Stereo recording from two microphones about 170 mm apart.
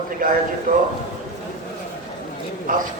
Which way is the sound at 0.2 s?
55° right (ahead or behind).